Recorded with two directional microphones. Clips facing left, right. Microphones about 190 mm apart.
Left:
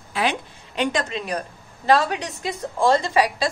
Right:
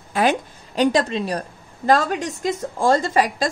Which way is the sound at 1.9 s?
45° right (ahead or behind).